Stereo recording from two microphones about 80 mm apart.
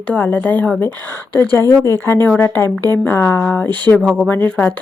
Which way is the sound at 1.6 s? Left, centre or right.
Left.